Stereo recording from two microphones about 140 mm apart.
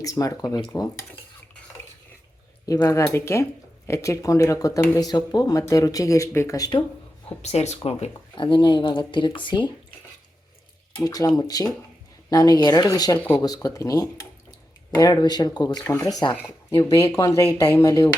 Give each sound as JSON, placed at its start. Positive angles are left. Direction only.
{"t": 0.0, "sound": "speech", "side_deg": 25}
{"t": 2.6, "sound": "speech", "side_deg": 25}
{"t": 7.4, "sound": "speech", "side_deg": 50}
{"t": 11.0, "sound": "speech", "side_deg": 25}
{"t": 13.1, "sound": "speech", "side_deg": 10}
{"t": 13.4, "sound": "speech", "side_deg": 25}